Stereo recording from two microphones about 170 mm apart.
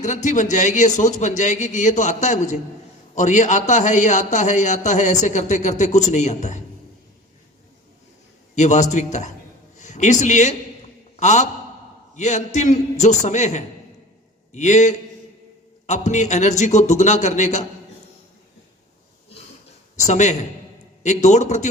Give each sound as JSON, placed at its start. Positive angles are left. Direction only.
{"t": 0.3, "sound": "speech", "side_deg": 45}
{"t": 8.5, "sound": "a man's voice", "side_deg": 45}
{"t": 20.1, "sound": "speech", "side_deg": 45}